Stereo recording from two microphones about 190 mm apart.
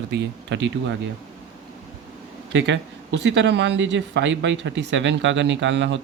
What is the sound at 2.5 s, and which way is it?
Speech, 70° right (ahead or behind).